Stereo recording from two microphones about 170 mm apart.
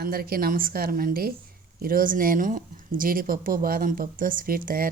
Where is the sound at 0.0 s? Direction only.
60° right (ahead or behind).